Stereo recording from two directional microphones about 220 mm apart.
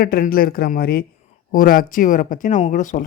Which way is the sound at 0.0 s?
40° left (ahead or behind).